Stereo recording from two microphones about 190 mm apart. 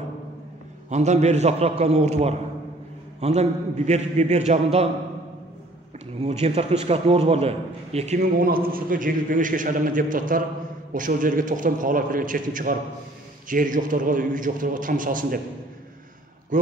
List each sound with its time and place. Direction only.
0.8 s a man's voice: 35° right (ahead or behind)
6.1 s a man's voice: 35° right (ahead or behind)